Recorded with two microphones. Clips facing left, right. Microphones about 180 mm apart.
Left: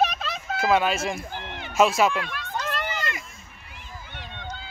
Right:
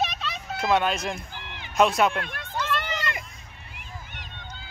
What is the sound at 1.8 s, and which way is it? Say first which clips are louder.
Speech: left 1 dB; 5° left (ahead or behind).